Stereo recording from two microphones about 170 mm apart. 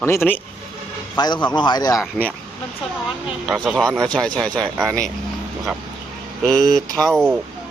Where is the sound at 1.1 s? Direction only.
25° left (ahead or behind).